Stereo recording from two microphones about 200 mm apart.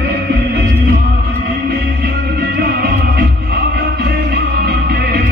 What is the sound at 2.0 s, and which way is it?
Music, 55° right (ahead or behind).